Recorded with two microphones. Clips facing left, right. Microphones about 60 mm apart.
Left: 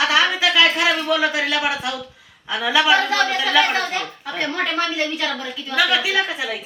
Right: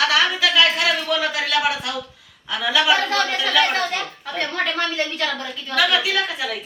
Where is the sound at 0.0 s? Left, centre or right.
Left.